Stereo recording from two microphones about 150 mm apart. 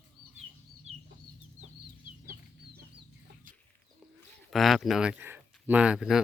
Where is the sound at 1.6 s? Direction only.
70° right (ahead or behind).